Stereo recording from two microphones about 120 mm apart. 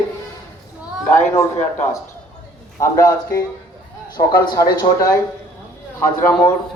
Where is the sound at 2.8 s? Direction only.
25° left (ahead or behind).